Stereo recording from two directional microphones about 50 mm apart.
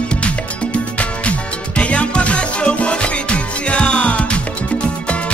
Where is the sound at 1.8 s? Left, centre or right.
Left.